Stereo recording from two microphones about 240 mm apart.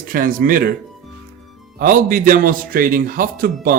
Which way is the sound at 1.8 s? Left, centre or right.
Right.